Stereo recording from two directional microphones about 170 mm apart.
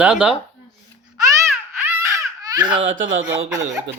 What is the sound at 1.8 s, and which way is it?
Baby cry, 20° right (ahead or behind).